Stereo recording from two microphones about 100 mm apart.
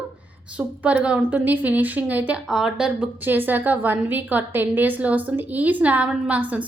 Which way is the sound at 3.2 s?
20° right (ahead or behind).